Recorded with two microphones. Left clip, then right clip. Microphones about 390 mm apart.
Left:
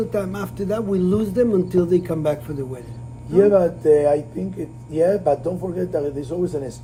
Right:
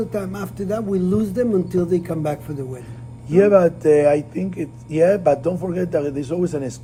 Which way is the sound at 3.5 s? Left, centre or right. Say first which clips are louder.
Right 2 dB; right.